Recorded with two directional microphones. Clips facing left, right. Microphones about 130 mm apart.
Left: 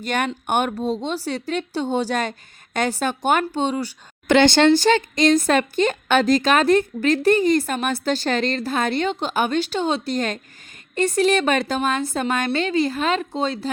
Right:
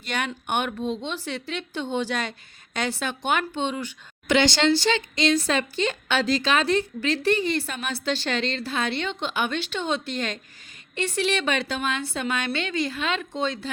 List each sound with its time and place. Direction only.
0.0 s speech: 45° left (ahead or behind)
4.3 s speech: 55° left (ahead or behind); by 13.7 s 35° left (ahead or behind)